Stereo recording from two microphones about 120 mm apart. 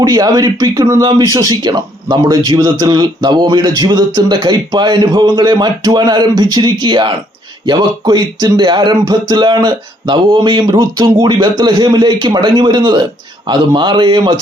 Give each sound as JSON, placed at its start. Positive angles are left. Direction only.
{"t": 0.0, "sound": "speech", "side_deg": -35}